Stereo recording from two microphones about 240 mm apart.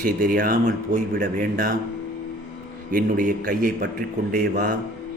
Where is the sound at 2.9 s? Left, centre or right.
Right.